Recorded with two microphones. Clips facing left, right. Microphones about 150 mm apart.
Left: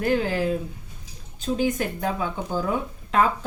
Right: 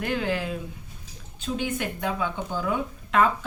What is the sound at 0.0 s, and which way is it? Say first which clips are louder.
Speech: left 4 dB; 40° left (ahead or behind).